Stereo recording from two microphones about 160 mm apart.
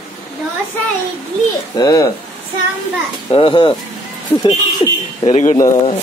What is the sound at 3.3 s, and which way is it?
Speech, 30° left (ahead or behind).